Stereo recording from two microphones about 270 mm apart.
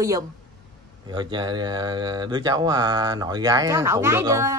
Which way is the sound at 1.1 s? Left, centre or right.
Centre.